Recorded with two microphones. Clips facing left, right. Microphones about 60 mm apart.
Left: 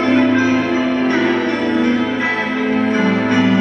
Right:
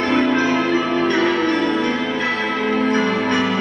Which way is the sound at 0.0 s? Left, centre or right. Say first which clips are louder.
Left 4 dB; centre.